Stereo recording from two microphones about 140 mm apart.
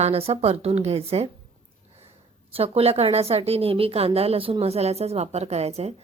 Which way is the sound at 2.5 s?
45° right (ahead or behind).